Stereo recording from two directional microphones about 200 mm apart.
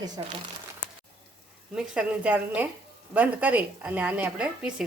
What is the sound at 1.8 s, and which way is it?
A woman's voice, 5° right (ahead or behind).